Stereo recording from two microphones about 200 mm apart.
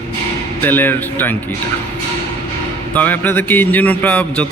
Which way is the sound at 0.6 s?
10° left (ahead or behind).